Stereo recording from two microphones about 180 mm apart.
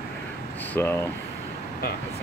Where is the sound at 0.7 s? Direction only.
10° left (ahead or behind).